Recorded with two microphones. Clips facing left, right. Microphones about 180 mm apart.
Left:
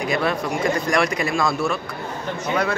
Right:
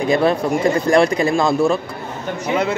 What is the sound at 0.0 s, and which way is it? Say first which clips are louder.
Speech: right 6 dB; 30° right (ahead or behind).